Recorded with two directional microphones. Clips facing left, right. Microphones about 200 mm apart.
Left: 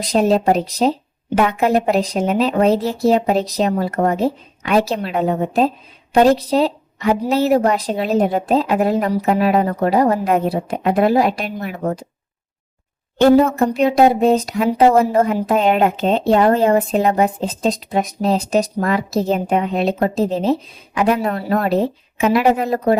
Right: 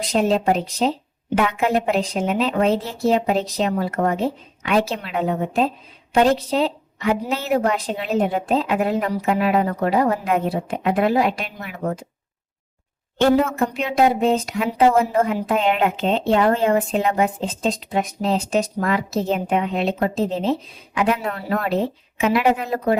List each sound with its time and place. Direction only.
0.0 s speech: 40° left (ahead or behind)
13.1 s speech: 35° left (ahead or behind)